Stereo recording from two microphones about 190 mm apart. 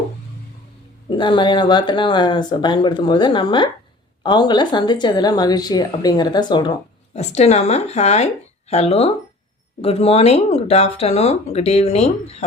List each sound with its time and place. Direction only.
1.1 s speech: 25° left (ahead or behind)
7.1 s speech: 35° left (ahead or behind)